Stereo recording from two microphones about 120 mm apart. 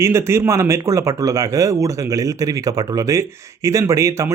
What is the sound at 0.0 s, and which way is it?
Speech, 20° right (ahead or behind).